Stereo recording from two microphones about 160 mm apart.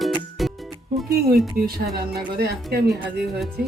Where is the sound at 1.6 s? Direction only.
70° right (ahead or behind).